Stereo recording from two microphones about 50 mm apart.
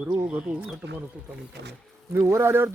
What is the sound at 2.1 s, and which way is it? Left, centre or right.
Speech, right.